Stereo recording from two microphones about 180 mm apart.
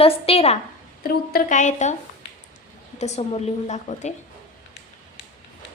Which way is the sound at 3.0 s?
35° left (ahead or behind).